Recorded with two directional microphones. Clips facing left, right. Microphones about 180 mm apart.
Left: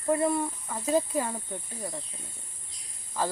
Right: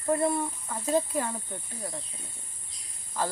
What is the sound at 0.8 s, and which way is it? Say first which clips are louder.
Speech: left 1 dB; 15° left (ahead or behind).